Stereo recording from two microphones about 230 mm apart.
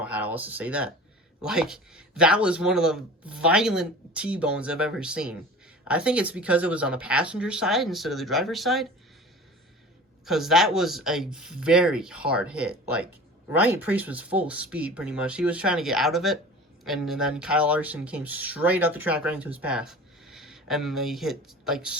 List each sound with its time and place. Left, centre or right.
0.0 s speech: centre
10.2 s speech: centre